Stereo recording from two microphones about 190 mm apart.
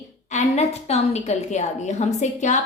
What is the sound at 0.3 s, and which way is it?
A woman's voice, 35° left (ahead or behind).